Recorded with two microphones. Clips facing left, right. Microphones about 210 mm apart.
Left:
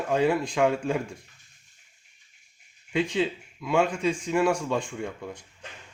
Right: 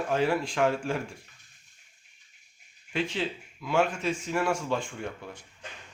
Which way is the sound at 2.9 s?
20° left (ahead or behind).